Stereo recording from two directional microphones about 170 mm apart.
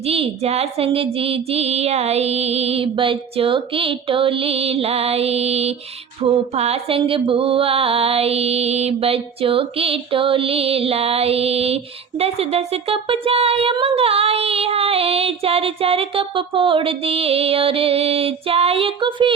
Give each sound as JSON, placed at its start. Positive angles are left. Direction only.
{"t": 0.0, "sound": "speech", "side_deg": -35}